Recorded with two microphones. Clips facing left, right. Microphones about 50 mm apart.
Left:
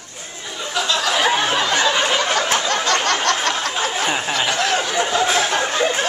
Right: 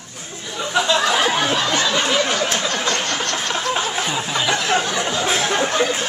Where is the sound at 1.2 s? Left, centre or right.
Centre.